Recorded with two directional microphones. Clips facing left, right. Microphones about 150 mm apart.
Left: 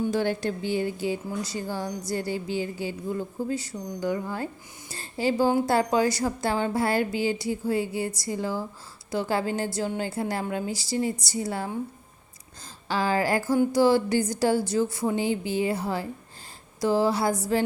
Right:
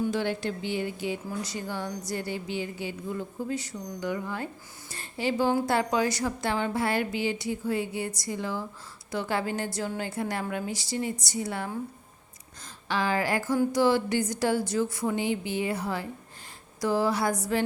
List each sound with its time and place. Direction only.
0.1 s a woman's voice: 40° left (ahead or behind)
12.9 s a woman's voice: 35° left (ahead or behind)